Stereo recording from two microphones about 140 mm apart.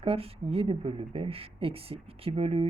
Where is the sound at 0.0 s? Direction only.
45° right (ahead or behind).